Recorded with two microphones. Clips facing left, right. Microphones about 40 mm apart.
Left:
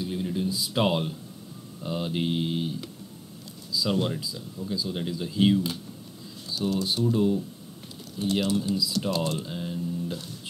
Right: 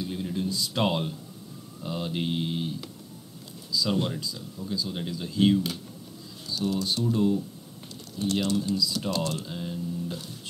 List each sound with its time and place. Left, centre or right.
0.0 s a sound: centre
1.8 s speech: centre
6.8 s speech: centre
9.2 s speech: centre
9.5 s speech: centre